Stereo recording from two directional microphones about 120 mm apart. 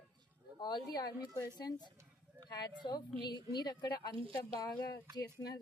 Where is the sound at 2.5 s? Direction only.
35° left (ahead or behind).